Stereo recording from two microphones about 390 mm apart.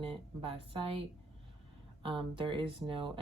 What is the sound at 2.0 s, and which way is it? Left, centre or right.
Speech, centre.